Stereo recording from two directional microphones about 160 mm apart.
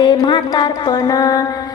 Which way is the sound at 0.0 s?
25° left (ahead or behind).